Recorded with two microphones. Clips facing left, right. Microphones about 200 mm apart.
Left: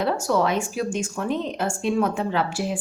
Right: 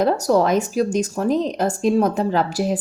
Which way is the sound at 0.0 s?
40° right (ahead or behind).